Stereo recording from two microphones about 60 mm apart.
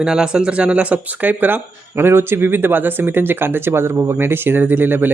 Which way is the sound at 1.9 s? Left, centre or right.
Right.